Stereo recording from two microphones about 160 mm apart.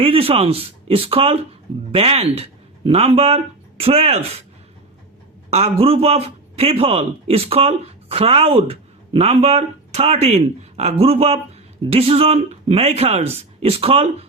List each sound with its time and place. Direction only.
0.0 s speech: 35° right (ahead or behind)
5.5 s a man's voice: 40° right (ahead or behind)